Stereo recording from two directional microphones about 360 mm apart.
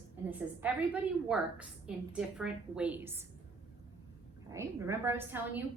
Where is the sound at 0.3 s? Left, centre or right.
Centre.